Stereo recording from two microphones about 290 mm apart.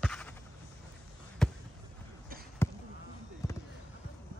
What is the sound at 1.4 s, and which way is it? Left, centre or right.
Basketball bounce, centre.